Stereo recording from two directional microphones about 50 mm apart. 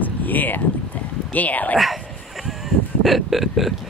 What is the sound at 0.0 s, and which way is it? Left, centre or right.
Boat, left.